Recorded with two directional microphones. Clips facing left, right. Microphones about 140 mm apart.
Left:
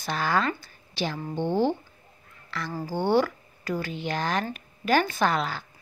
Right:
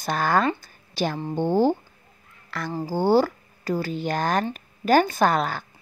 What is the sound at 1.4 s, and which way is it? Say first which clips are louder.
Speech: right 4 dB; 40° right (ahead or behind).